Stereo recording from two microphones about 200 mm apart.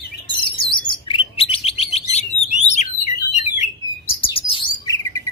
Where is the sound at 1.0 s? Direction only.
30° left (ahead or behind).